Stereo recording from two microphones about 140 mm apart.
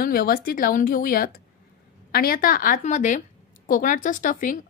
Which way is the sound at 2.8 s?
60° left (ahead or behind).